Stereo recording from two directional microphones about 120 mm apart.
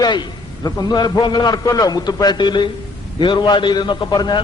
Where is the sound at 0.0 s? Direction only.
35° left (ahead or behind).